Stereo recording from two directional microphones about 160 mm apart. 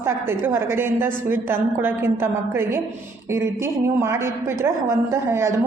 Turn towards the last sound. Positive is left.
turn(degrees=-15)  # may be behind; listen again after turning